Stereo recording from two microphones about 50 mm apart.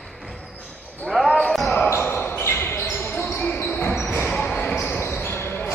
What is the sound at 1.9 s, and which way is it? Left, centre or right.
Basketball bounce, left.